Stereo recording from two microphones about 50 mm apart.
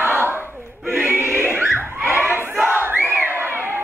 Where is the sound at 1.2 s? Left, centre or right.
Right.